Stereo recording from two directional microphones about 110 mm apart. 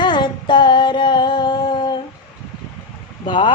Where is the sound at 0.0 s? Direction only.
45° left (ahead or behind).